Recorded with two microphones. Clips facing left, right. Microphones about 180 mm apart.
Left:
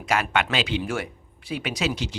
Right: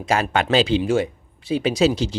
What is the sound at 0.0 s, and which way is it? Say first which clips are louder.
Speech: right 3 dB; 30° right (ahead or behind).